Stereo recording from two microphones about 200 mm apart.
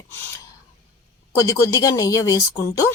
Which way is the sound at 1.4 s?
15° left (ahead or behind).